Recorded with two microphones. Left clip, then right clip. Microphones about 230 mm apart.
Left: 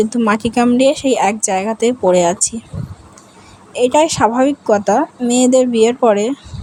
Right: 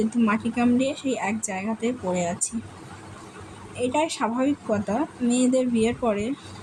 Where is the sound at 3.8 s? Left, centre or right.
Left.